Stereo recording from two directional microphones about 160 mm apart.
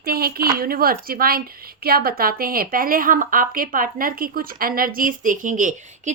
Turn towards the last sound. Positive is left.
turn(degrees=-50)  # may be behind; listen again after turning